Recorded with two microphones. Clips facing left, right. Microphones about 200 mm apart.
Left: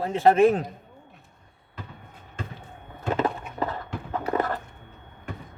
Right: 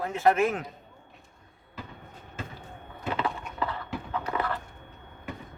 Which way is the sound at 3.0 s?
45° left (ahead or behind).